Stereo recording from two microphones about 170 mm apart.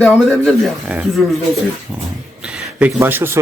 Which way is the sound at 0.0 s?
Centre (ahead or behind).